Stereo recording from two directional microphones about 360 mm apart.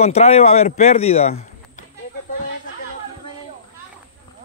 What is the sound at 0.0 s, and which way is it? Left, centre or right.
A man's voice, centre.